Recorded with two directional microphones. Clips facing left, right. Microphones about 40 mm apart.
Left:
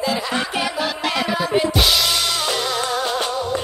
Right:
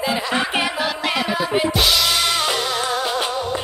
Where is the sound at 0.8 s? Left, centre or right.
Centre.